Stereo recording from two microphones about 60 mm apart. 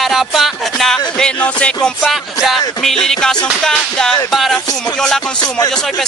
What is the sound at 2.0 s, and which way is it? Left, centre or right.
Speech, centre.